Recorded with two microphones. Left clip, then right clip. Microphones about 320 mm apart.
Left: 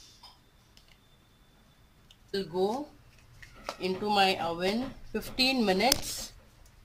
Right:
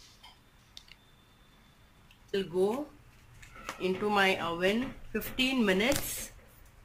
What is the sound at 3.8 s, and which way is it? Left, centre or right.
Speech, centre.